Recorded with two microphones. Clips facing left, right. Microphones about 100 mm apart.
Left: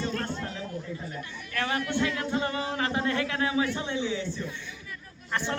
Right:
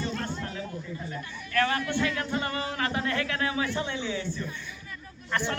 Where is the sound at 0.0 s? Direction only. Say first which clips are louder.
Left 1 dB; centre (ahead or behind).